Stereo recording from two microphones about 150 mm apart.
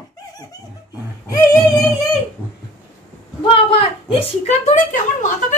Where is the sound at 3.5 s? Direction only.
35° left (ahead or behind); by 5.3 s 55° left (ahead or behind).